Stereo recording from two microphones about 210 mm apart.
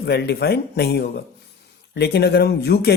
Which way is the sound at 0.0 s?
50° left (ahead or behind).